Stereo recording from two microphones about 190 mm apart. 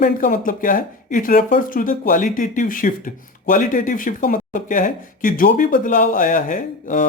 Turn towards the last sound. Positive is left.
turn(degrees=45)  # may be behind; listen again after turning